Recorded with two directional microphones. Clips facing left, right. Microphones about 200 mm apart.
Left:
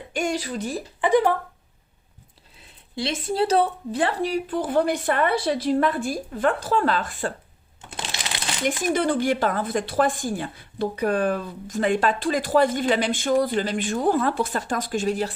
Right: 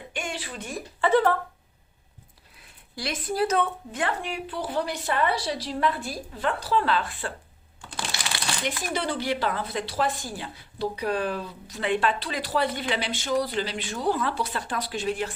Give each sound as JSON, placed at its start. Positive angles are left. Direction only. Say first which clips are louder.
{"t": 0.1, "sound": "speech", "louder": "left 9 dB", "side_deg": 40}
{"t": 1.0, "sound": "speech", "louder": "left 2 dB", "side_deg": 15}
{"t": 2.6, "sound": "speech", "louder": "left 8 dB", "side_deg": 25}
{"t": 7.8, "sound": "crumpling", "louder": "left 1 dB", "side_deg": 20}
{"t": 8.6, "sound": "speech", "louder": "left 8 dB", "side_deg": 50}